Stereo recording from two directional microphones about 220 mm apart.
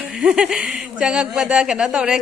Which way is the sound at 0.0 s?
5° right (ahead or behind).